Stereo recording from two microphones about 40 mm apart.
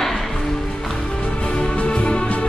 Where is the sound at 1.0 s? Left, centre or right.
Left.